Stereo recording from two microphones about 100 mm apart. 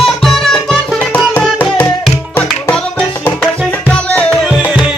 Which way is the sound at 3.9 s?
10° left (ahead or behind).